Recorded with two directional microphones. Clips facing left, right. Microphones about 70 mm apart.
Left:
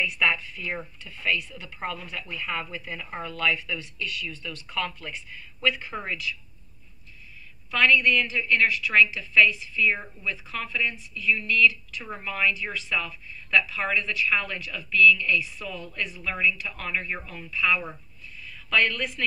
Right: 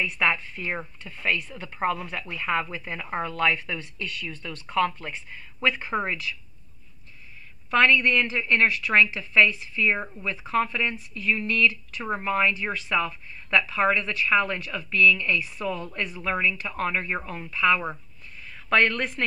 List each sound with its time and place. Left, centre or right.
0.0 s speech: right
7.7 s speech: right
9.0 s speech: right
18.5 s a woman's voice: right